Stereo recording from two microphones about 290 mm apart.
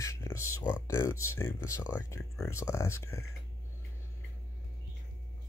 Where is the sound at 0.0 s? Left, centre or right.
Centre.